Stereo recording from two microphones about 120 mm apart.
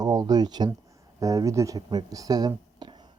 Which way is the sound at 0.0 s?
30° right (ahead or behind).